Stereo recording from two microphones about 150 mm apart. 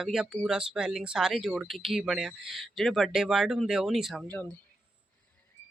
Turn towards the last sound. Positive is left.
turn(degrees=10)  # may be behind; listen again after turning